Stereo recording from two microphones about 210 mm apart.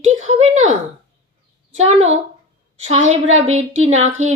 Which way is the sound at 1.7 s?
30° right (ahead or behind).